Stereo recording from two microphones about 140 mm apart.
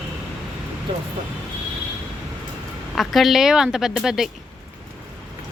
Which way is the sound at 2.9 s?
Centre (ahead or behind).